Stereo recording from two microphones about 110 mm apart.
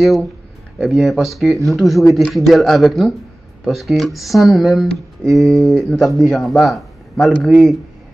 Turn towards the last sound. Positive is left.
turn(degrees=0)  # may be behind; listen again after turning